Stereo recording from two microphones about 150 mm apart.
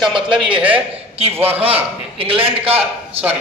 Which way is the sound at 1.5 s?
40° right (ahead or behind).